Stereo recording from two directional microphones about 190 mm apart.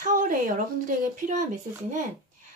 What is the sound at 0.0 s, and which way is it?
Speech, 45° right (ahead or behind).